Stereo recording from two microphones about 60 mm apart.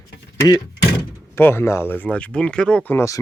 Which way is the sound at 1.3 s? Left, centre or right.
Left.